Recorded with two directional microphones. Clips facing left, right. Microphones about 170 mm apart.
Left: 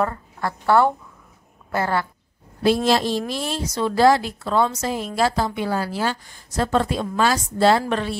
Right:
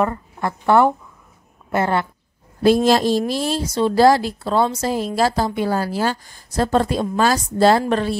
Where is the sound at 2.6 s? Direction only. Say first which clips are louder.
Right 4 dB; 45° right (ahead or behind).